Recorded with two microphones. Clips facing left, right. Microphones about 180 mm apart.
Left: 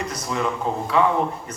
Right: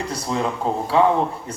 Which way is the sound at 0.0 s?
30° right (ahead or behind).